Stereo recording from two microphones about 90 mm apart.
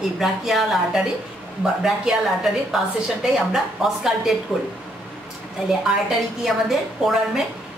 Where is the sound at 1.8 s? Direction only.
5° right (ahead or behind).